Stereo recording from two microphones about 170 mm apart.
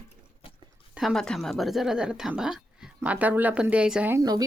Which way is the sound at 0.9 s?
Centre (ahead or behind).